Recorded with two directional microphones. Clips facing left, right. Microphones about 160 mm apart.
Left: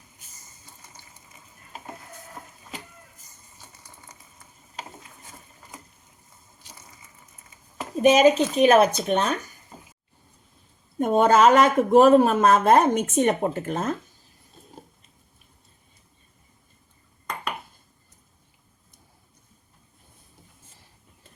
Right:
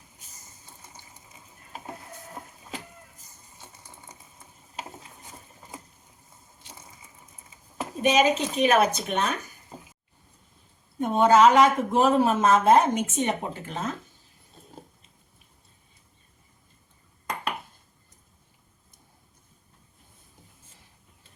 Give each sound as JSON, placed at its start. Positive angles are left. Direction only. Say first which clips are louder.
{"t": 6.6, "sound": "crushing", "louder": "right 2 dB", "side_deg": -25}
{"t": 8.0, "sound": "speech", "louder": "left 5 dB", "side_deg": 45}
{"t": 11.0, "sound": "speech", "louder": "left 1 dB", "side_deg": 50}